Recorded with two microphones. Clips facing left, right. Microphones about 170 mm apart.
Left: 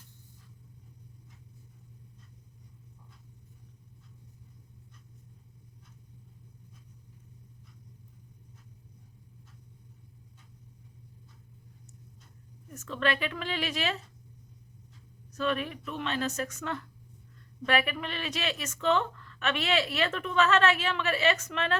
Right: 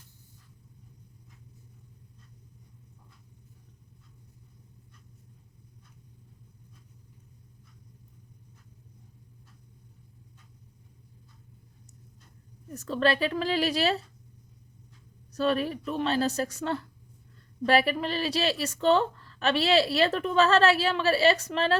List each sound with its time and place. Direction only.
12.7 s a woman's voice: 35° right (ahead or behind)
15.3 s a woman's voice: 35° right (ahead or behind)